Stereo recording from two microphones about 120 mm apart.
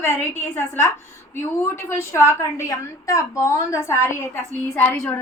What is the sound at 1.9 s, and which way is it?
A woman's voice, 20° left (ahead or behind).